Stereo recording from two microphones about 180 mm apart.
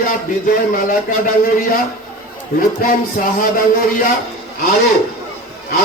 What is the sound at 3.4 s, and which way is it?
Speech, 50° left (ahead or behind).